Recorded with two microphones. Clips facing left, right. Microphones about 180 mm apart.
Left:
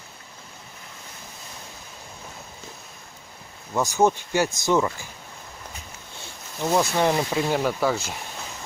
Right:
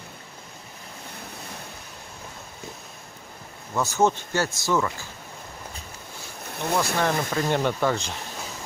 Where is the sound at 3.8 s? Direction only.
15° left (ahead or behind).